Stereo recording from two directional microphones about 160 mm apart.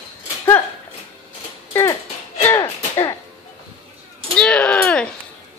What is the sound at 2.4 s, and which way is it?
Music, 20° left (ahead or behind).